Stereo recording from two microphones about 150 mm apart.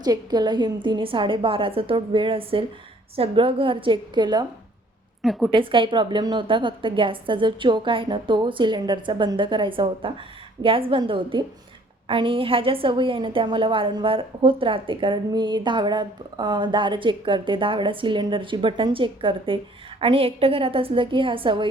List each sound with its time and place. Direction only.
0.0 s a woman's voice: 25° right (ahead or behind)
5.2 s a woman's voice: centre (ahead or behind)
5.5 s a woman's voice: 35° right (ahead or behind)